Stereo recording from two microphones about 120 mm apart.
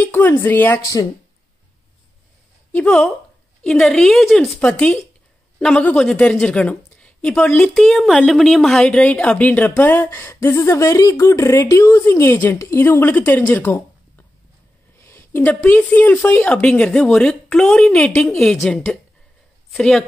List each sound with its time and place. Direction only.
0.0 s speech: 15° left (ahead or behind)
2.7 s a woman's voice: 10° left (ahead or behind)